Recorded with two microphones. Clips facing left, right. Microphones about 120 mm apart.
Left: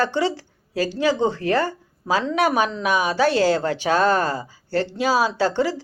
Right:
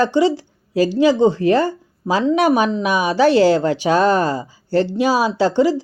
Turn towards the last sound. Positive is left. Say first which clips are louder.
# right 5 dB
turn(degrees=-15)  # may be behind; listen again after turning